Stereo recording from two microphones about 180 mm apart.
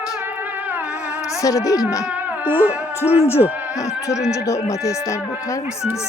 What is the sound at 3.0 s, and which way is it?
Speech, 35° left (ahead or behind).